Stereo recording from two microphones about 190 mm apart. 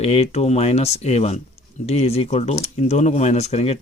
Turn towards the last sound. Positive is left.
turn(degrees=35)  # may be behind; listen again after turning